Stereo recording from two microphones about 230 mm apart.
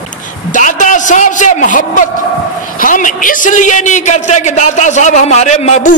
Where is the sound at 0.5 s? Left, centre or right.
Left.